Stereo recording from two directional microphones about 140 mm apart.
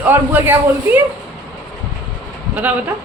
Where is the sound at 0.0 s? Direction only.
15° right (ahead or behind).